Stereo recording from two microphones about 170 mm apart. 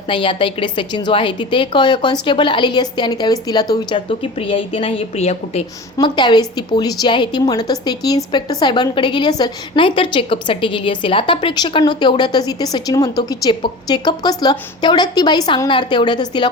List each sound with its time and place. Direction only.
0.1 s a woman's voice: 30° left (ahead or behind)
6.1 s a woman's voice: 25° left (ahead or behind)